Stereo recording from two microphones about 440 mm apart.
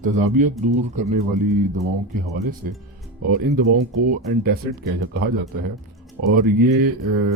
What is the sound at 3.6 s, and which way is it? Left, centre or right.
Speech, centre.